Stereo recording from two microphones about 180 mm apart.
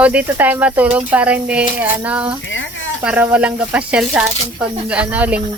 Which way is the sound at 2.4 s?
90° left.